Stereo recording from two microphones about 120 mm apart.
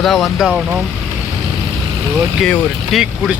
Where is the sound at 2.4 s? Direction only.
5° left (ahead or behind).